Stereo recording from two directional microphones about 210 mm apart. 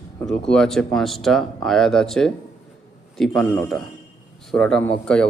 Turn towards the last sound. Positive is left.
turn(degrees=5)  # may be behind; listen again after turning